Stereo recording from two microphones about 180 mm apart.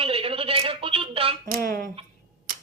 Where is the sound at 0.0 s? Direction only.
30° right (ahead or behind).